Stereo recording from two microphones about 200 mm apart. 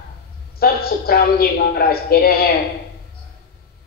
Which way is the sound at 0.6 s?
50° left (ahead or behind).